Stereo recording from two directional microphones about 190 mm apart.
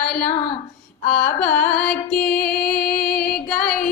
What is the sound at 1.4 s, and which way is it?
Music, 5° left (ahead or behind).